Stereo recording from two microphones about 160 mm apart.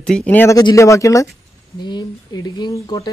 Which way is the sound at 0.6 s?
20° left (ahead or behind).